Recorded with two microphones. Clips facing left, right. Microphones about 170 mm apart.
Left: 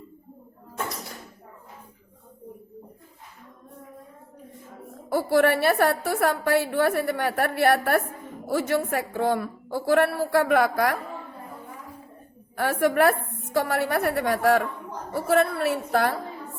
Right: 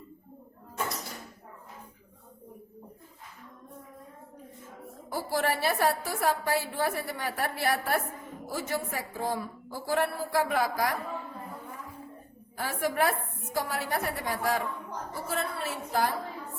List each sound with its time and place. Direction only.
5.0 s a woman's voice: 65° left (ahead or behind)
12.5 s a woman's voice: 65° left (ahead or behind)